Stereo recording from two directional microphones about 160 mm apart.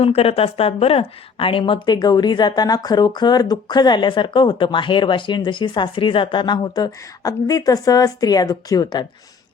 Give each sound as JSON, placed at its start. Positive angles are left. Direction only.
{"t": 0.0, "sound": "a woman's voice", "side_deg": 40}